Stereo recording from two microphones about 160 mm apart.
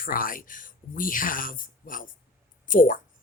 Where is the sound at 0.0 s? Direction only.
60° left (ahead or behind).